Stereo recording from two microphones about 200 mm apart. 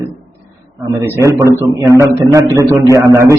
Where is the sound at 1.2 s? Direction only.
15° right (ahead or behind).